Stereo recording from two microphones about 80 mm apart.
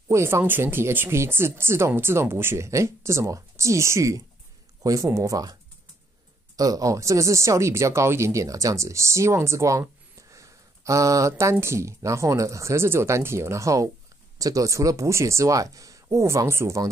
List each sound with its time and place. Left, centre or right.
0.1 s speech: right
10.3 s a sound: right
11.6 s speech: right